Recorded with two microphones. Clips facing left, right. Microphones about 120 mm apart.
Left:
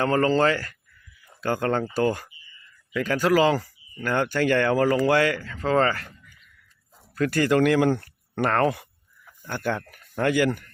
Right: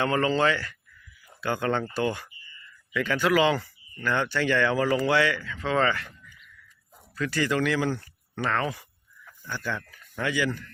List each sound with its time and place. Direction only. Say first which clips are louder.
0.0 s speech: left 3 dB; 40° left (ahead or behind)
7.2 s speech: left 6 dB; 50° left (ahead or behind)